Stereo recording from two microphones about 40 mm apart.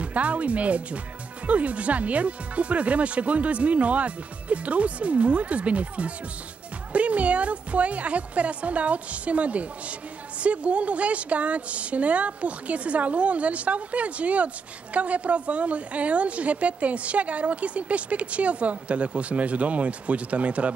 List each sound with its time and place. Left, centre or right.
0.0 s a woman's voice: right